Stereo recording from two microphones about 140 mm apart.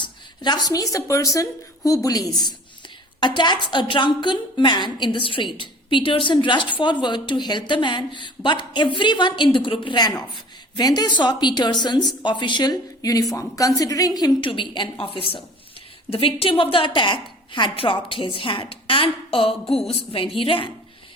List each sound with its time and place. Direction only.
0.0 s a woman's voice: 30° left (ahead or behind)